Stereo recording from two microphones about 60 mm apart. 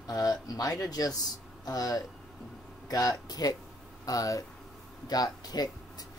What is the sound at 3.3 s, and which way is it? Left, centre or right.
Speech, left.